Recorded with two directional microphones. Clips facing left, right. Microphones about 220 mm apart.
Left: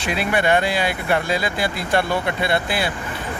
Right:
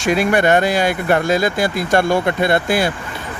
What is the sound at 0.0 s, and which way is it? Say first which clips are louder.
Speech: right 6 dB; 45° right (ahead or behind).